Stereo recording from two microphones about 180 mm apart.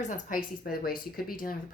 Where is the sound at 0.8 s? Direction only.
55° left (ahead or behind).